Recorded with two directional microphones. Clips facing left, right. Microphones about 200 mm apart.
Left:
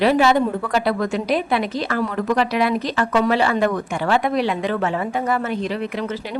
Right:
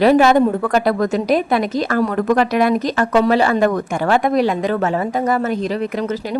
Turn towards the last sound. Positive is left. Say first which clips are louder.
# right 4 dB
turn(degrees=-40)  # may be behind; listen again after turning